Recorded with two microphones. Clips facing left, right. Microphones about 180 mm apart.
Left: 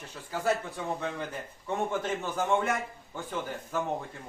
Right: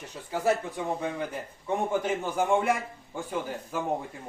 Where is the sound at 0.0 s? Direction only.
20° right (ahead or behind).